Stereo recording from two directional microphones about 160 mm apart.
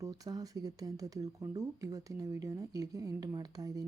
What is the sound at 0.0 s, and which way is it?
Speech, 20° right (ahead or behind).